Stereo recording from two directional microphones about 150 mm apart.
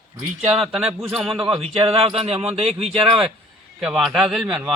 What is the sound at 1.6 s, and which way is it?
Speech, 40° right (ahead or behind).